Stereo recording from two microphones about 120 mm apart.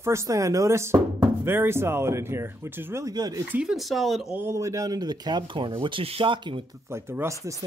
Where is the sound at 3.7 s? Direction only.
Centre (ahead or behind).